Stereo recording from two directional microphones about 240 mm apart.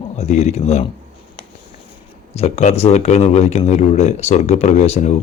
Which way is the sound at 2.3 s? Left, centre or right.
Left.